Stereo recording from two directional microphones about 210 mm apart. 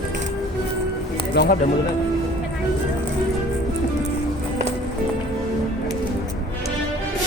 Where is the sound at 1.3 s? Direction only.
50° left (ahead or behind).